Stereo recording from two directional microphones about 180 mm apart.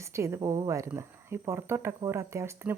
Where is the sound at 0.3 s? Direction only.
20° right (ahead or behind).